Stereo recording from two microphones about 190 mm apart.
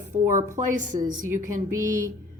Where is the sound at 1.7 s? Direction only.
15° right (ahead or behind).